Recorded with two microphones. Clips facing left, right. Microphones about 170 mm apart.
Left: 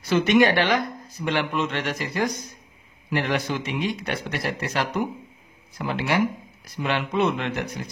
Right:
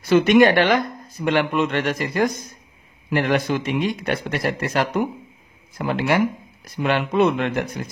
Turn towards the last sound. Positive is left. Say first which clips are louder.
# right 5 dB
turn(degrees=-50)  # may be behind; listen again after turning